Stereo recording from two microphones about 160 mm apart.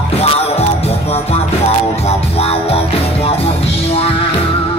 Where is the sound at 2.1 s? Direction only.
40° left (ahead or behind).